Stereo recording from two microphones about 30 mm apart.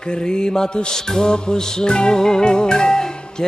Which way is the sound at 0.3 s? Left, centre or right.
Left.